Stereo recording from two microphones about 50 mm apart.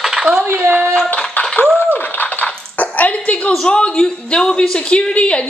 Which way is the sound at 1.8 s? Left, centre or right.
Left.